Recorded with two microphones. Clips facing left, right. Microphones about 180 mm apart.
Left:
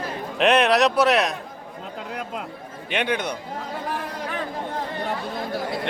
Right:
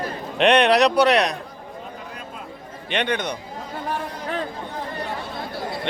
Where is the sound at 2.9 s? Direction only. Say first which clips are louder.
Right 1 dB; 5° left (ahead or behind).